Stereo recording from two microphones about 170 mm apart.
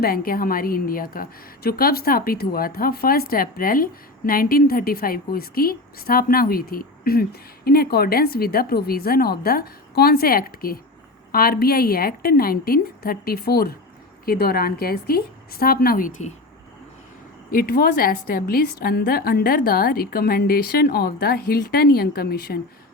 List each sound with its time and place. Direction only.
0.0 s a woman's voice: 60° left (ahead or behind)
17.5 s a woman's voice: 60° left (ahead or behind)